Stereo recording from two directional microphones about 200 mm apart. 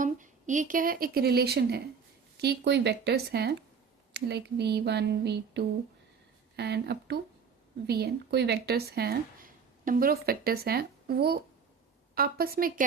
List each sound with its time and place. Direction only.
0.0 s a woman's voice: 40° right (ahead or behind)
2.4 s a sound: 55° right (ahead or behind)
7.9 s speech: 55° right (ahead or behind)